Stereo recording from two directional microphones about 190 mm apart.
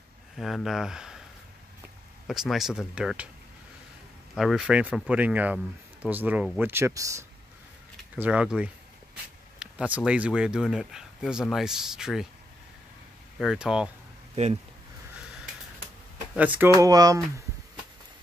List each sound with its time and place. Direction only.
0.4 s speech: centre (ahead or behind)
2.2 s speech: centre (ahead or behind)
4.4 s speech: centre (ahead or behind); by 7.2 s 15° right (ahead or behind)
8.2 s speech: 5° right (ahead or behind)
13.4 s speech: 5° right (ahead or behind)
14.3 s speech: 35° right (ahead or behind)
16.3 s speech: 10° right (ahead or behind)